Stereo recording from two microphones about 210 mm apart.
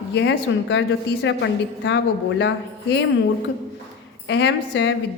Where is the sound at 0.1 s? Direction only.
60° left (ahead or behind).